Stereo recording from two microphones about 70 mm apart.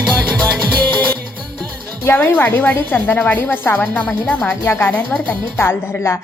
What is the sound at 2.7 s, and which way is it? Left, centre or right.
A woman's voice, left.